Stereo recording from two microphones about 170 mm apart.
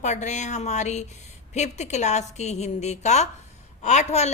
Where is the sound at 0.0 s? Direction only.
45° left (ahead or behind).